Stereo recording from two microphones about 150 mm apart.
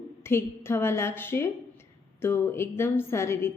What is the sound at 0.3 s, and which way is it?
A woman's voice, 15° left (ahead or behind).